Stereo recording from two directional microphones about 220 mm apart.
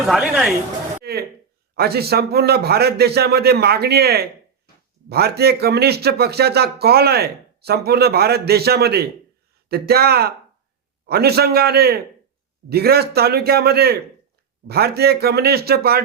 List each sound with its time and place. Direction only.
0.0 s speech: centre (ahead or behind)
1.7 s a man's voice: 45° right (ahead or behind)